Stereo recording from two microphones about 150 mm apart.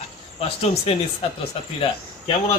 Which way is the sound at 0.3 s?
40° left (ahead or behind).